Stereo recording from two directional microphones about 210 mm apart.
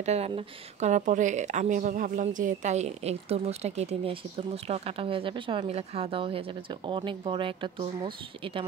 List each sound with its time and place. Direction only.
0.0 s speech: 30° right (ahead or behind)